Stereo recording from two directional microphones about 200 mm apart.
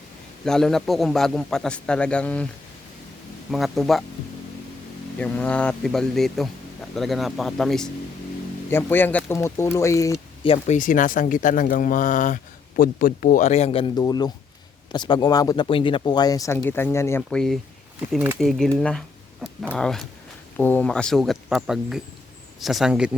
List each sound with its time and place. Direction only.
0.4 s a man's voice: centre (ahead or behind)
3.5 s a man's voice: centre (ahead or behind)
5.1 s a man's voice: 5° left (ahead or behind)
10.4 s speech: 25° left (ahead or behind)
10.8 s a man's voice: 40° left (ahead or behind); by 18.7 s centre (ahead or behind)
18.8 s a sound: 5° left (ahead or behind)
19.7 s a man's voice: 5° left (ahead or behind)